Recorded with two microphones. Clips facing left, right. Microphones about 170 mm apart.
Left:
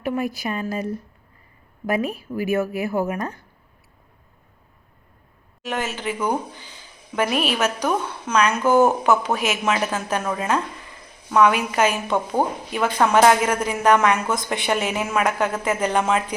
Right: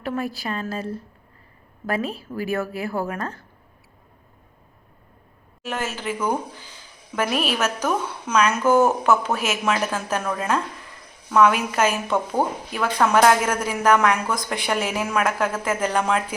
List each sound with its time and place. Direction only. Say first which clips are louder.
0.0 s a woman's voice: left 2 dB; 15° left (ahead or behind)
5.6 s speech: left 1 dB; centre (ahead or behind)